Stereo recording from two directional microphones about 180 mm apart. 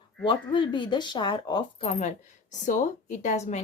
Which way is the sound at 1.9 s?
40° left (ahead or behind).